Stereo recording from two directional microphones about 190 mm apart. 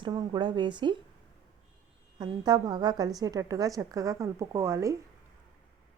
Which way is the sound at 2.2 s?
20° right (ahead or behind).